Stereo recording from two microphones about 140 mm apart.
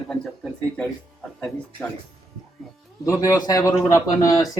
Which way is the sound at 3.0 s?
25° left (ahead or behind).